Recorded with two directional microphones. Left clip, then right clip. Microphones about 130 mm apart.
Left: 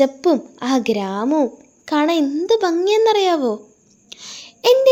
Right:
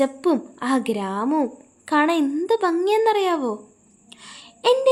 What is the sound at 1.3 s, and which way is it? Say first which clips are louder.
Speech: left 4 dB; 15° left (ahead or behind).